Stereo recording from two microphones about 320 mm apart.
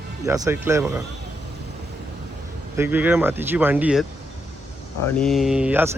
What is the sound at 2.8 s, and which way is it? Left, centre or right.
Speech, centre.